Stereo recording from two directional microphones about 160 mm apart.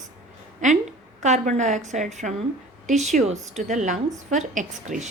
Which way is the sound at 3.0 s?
45° right (ahead or behind).